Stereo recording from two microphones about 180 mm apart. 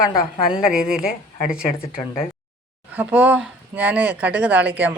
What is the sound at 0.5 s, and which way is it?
A woman's voice, 5° right (ahead or behind).